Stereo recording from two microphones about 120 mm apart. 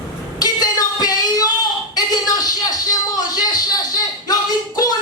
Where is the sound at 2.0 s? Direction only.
30° left (ahead or behind).